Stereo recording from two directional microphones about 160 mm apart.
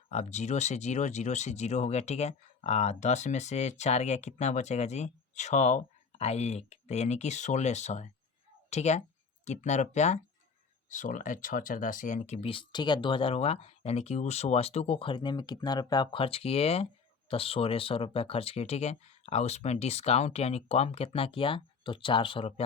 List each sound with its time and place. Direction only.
0.1 s speech: 45° left (ahead or behind)